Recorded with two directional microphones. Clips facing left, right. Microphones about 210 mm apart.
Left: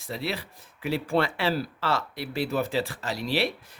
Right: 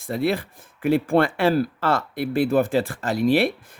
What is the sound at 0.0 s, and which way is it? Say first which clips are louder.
Speech: right 9 dB; 50° right (ahead or behind).